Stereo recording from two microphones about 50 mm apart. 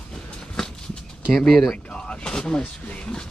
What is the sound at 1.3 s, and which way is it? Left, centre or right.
Speech, centre.